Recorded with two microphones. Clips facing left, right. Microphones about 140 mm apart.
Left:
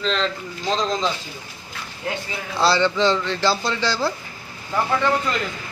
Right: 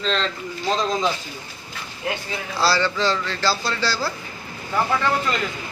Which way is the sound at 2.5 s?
20° left (ahead or behind).